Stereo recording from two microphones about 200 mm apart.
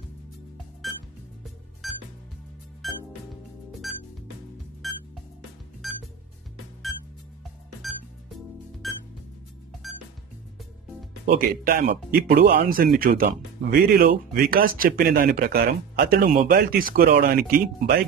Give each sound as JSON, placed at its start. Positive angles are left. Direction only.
{"t": 1.8, "sound": "music", "side_deg": 0}
{"t": 8.8, "sound": "music", "side_deg": 0}
{"t": 11.2, "sound": "speech", "side_deg": -45}